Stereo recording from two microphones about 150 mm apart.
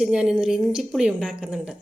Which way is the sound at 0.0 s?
5° right (ahead or behind).